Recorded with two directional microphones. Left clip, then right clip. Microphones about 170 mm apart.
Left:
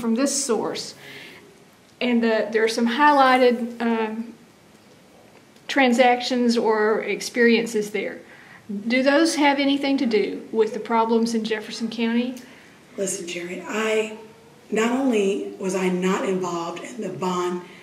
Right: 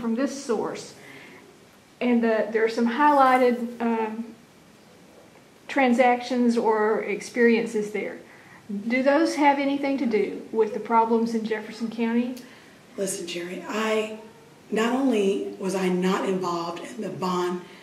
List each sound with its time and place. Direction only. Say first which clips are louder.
0.0 s a woman's voice: left 4 dB; 30° left (ahead or behind)
2.0 s a woman's voice: left 2 dB; 20° left (ahead or behind)
5.7 s a woman's voice: left 3 dB; 25° left (ahead or behind)
13.0 s a woman's voice: left 2 dB; centre (ahead or behind)